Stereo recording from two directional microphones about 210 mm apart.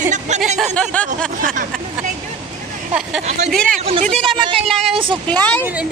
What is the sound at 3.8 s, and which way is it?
Speech, 30° right (ahead or behind).